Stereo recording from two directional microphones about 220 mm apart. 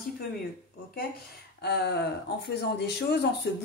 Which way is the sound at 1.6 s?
50° left (ahead or behind).